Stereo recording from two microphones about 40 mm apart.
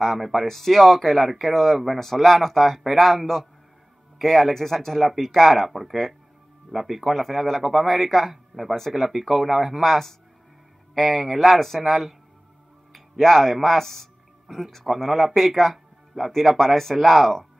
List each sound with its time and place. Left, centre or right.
0.0 s speech: centre
8.7 s speech: centre
9.0 s speech: centre
11.0 s speech: centre